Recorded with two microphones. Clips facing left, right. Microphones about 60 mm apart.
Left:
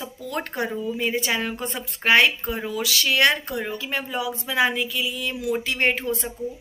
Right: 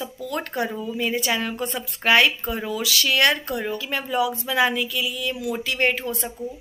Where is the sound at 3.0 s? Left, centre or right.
Left.